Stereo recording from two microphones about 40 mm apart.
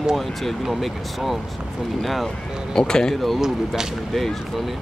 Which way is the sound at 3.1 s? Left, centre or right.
Centre.